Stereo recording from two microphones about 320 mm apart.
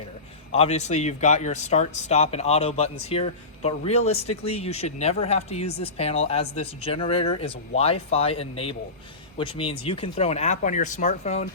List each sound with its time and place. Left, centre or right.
0.5 s speech: centre